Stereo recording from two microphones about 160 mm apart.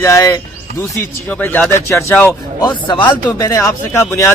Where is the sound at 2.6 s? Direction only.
30° left (ahead or behind).